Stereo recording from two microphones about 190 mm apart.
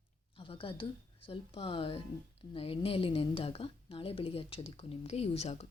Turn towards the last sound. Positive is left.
turn(degrees=35)  # may be behind; listen again after turning